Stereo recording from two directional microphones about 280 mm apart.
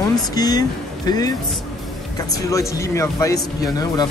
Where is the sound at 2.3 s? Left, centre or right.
Centre.